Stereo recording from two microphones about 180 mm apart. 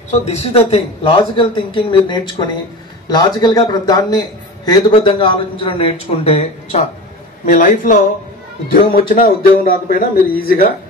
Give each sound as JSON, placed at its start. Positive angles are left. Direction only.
{"t": 0.1, "sound": "a man's voice", "side_deg": 35}
{"t": 7.4, "sound": "speech", "side_deg": 50}
{"t": 9.1, "sound": "speech", "side_deg": 55}